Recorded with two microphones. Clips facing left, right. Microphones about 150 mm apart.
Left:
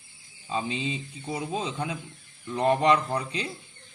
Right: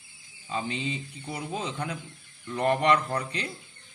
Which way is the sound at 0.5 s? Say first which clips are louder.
Left 2 dB; 20° left (ahead or behind).